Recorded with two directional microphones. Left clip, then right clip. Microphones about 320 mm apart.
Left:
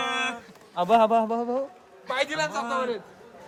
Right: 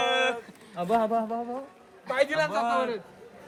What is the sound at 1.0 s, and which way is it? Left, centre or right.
Speech, left.